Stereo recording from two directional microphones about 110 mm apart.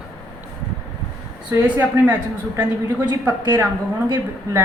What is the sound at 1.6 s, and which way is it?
Speech, 15° right (ahead or behind).